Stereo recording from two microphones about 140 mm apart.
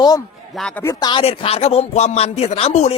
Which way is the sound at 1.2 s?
45° left (ahead or behind).